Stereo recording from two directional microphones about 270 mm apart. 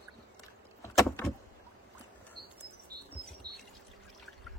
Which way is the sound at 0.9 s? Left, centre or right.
Centre.